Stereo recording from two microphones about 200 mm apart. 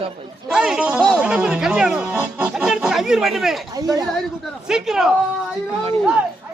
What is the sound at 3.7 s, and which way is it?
Speech, 20° right (ahead or behind).